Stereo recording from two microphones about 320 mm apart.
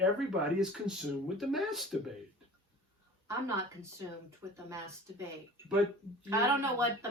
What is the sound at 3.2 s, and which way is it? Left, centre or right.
Speech, centre.